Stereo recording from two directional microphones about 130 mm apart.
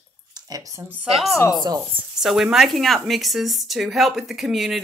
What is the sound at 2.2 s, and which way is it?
Speech, 5° right (ahead or behind).